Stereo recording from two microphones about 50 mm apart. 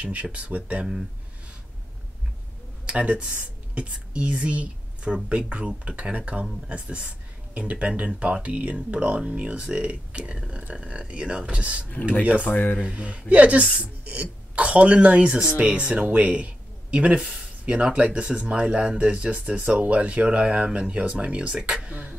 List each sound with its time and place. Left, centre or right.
0.0 s speech: right
2.9 s speech: right
11.8 s speech: left
12.8 s speech: right